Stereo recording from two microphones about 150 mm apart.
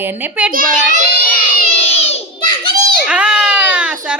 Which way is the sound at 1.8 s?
45° left (ahead or behind).